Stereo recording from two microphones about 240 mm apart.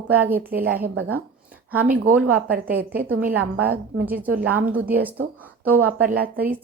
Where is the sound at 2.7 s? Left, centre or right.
Centre.